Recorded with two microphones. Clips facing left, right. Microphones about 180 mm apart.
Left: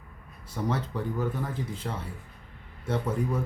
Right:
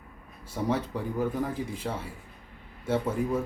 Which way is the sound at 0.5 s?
10° right (ahead or behind).